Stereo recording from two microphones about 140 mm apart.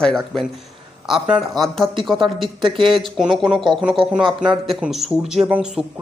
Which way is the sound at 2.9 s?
Centre (ahead or behind).